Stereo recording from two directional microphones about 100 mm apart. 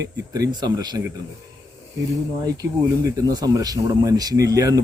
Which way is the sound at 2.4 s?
35° right (ahead or behind).